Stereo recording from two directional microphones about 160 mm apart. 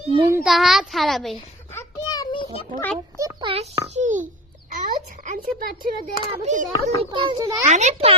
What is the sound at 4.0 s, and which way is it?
Speech, 55° right (ahead or behind).